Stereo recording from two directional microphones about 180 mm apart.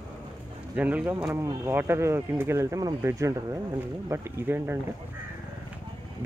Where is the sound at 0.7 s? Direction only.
10° right (ahead or behind).